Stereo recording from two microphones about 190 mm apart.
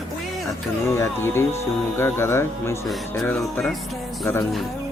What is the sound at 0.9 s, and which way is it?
Speech, 15° left (ahead or behind).